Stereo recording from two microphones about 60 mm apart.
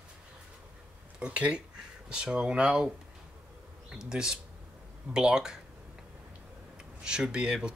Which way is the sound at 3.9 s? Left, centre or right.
Centre.